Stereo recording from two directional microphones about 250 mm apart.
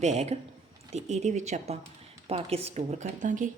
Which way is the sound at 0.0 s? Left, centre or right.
Right.